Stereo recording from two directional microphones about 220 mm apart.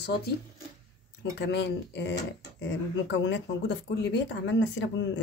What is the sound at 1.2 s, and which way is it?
Speech, 50° left (ahead or behind).